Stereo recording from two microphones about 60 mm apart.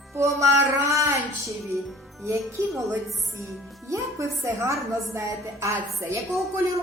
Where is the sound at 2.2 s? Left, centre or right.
Right.